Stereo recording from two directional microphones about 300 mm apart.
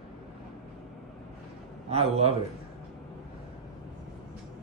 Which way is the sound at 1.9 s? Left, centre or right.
Centre.